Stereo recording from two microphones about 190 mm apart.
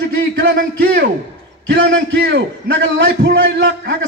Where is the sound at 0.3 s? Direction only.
65° right (ahead or behind).